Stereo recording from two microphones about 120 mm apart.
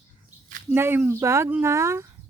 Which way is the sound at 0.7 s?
20° right (ahead or behind).